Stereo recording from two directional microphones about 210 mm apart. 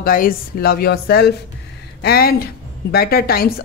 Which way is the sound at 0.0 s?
45° left (ahead or behind).